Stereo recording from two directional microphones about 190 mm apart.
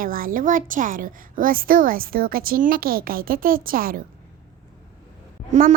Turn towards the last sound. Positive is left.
turn(degrees=-40)  # may be behind; listen again after turning